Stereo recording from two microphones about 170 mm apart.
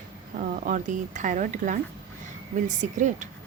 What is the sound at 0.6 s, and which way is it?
A woman's voice, 45° right (ahead or behind).